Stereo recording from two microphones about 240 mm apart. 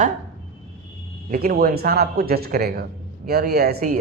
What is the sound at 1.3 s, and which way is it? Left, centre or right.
Speech, right.